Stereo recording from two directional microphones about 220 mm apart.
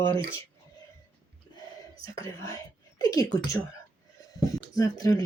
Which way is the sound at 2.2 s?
15° left (ahead or behind).